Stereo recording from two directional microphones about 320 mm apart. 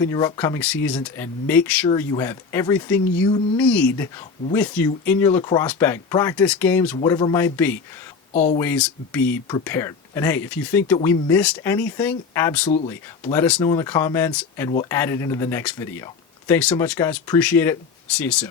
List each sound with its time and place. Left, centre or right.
0.0 s speech: centre
8.3 s speech: left
8.5 s speech: centre